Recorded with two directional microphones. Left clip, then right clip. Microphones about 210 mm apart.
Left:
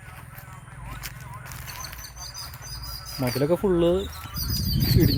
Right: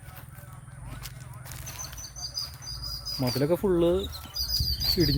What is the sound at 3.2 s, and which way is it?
Speech, centre (ahead or behind).